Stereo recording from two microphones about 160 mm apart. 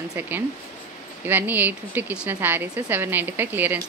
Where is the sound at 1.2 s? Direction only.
10° right (ahead or behind).